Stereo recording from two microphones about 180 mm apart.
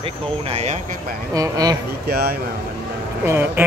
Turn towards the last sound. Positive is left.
turn(degrees=-10)  # may be behind; listen again after turning